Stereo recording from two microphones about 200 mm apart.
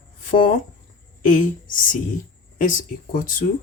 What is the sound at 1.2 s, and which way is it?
Speech, 40° left (ahead or behind).